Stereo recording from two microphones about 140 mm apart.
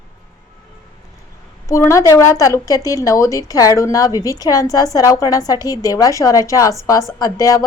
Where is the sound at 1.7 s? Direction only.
20° left (ahead or behind).